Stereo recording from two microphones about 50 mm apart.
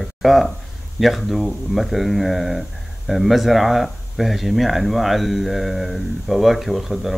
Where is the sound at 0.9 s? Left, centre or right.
Centre.